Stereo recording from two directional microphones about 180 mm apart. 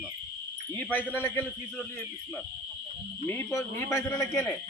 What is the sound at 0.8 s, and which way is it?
Speech, 10° left (ahead or behind).